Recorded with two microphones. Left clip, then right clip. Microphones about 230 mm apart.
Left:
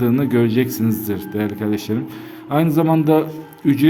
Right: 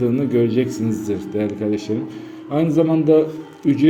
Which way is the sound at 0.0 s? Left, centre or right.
Left.